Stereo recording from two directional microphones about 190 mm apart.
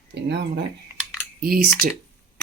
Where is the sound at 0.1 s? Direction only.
65° right (ahead or behind).